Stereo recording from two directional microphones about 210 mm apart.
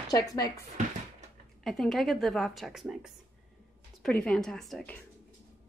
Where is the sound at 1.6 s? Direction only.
Centre (ahead or behind).